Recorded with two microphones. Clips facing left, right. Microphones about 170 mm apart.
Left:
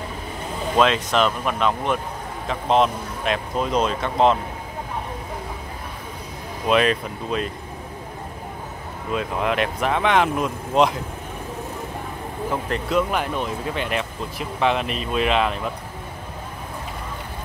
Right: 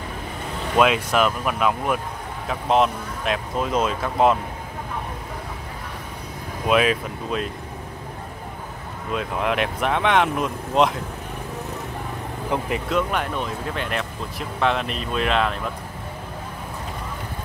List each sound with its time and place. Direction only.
0.7 s speech: 10° right (ahead or behind)
6.7 s speech: 5° right (ahead or behind)
9.1 s speech: centre (ahead or behind)
12.4 s speech: 10° right (ahead or behind)
12.9 s speech: centre (ahead or behind)